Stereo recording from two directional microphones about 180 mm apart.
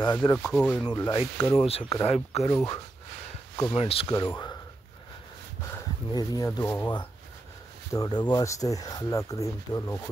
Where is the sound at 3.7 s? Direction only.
30° left (ahead or behind).